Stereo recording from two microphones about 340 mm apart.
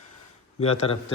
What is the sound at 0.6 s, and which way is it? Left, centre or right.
Speech, centre.